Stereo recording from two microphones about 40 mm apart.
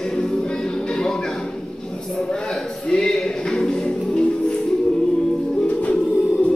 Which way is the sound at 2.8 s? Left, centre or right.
Centre.